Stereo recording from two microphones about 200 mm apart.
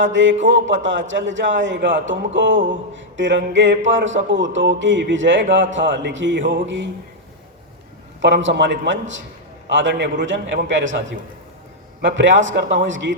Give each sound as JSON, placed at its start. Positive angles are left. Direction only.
{"t": 0.0, "sound": "speech", "side_deg": -70}
{"t": 8.2, "sound": "a man's voice", "side_deg": -65}
{"t": 12.0, "sound": "a man's voice", "side_deg": -65}